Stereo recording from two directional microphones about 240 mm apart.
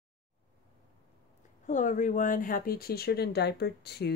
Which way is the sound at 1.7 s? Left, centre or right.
Left.